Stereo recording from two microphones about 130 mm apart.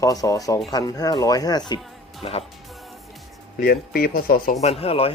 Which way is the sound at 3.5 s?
90° left.